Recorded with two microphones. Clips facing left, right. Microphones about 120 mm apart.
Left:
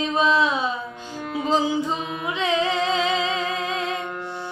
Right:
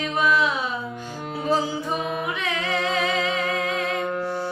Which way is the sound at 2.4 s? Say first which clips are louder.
Left 4 dB; 20° left (ahead or behind).